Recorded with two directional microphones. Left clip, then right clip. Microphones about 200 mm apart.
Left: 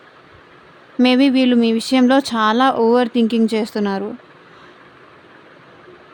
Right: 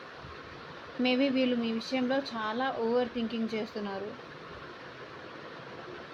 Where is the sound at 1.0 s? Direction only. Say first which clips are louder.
Left 13 dB; 55° left (ahead or behind).